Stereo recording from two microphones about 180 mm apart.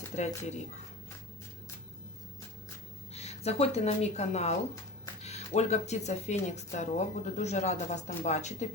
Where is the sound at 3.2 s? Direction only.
35° left (ahead or behind).